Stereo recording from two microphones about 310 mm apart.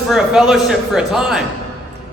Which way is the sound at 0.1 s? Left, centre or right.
Centre.